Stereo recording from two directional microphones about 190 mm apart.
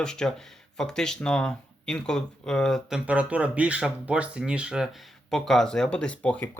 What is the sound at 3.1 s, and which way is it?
Speech, 5° right (ahead or behind).